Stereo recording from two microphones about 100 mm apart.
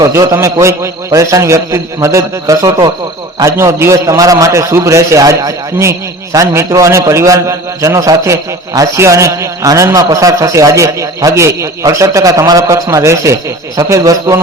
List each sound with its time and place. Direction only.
0.0 s a man's voice: 35° right (ahead or behind)